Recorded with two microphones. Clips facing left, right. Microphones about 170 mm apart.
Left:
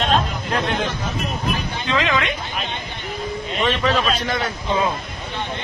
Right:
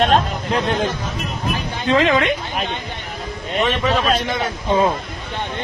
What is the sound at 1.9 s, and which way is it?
Speech, 40° right (ahead or behind).